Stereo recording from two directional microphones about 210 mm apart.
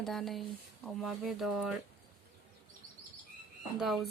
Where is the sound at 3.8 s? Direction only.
Centre (ahead or behind).